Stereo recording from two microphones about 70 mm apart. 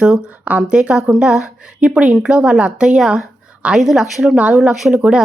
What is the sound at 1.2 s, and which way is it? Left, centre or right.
Speech, centre.